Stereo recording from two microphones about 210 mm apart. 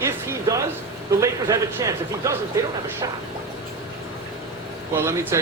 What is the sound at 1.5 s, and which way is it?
A man's voice, 15° right (ahead or behind).